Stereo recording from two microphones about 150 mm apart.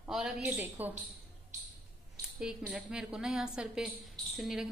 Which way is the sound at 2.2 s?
5° right (ahead or behind).